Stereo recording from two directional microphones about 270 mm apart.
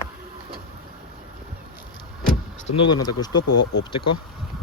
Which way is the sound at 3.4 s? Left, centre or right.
Left.